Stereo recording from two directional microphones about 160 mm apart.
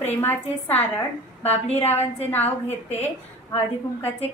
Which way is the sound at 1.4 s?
40° left (ahead or behind).